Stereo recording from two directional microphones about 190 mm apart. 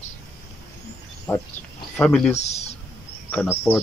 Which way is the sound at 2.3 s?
35° left (ahead or behind).